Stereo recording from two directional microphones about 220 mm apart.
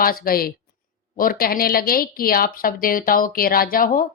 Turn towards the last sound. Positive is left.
turn(degrees=40)  # may be behind; listen again after turning